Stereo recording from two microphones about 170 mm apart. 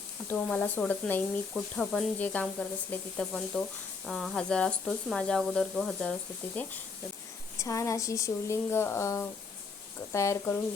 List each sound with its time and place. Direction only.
0.3 s speech: 5° left (ahead or behind)